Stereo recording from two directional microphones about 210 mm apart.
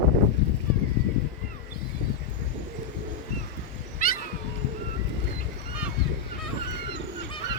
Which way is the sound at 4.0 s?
40° left (ahead or behind).